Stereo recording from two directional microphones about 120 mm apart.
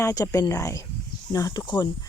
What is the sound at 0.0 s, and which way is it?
Speech, 30° left (ahead or behind).